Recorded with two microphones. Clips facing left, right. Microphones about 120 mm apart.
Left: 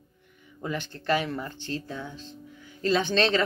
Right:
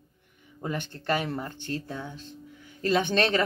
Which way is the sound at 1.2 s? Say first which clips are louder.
Even; 30° right (ahead or behind).